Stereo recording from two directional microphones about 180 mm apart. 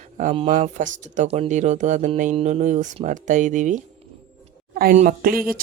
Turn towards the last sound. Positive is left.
turn(degrees=-55)  # may be behind; listen again after turning